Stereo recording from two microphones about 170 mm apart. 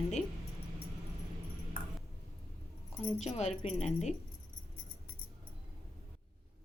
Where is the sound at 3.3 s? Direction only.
40° left (ahead or behind).